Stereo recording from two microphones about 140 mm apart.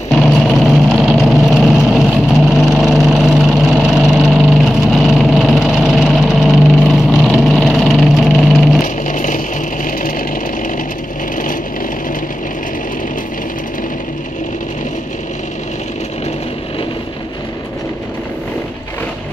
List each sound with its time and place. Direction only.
0.1 s vehicle: centre (ahead or behind)
8.8 s music: 70° left (ahead or behind)
9.8 s sewing machine: 80° left